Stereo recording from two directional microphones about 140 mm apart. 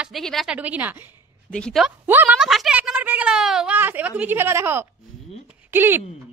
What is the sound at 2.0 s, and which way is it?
Speech, 15° right (ahead or behind).